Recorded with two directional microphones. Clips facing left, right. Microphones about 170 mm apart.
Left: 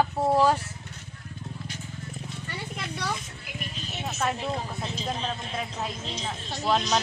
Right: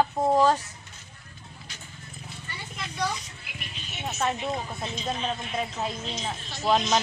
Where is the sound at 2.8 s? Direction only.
55° left (ahead or behind).